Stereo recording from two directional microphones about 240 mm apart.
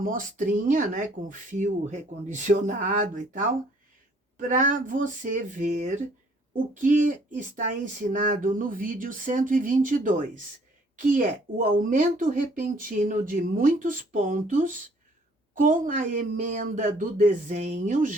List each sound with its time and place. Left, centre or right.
0.0 s a woman's voice: right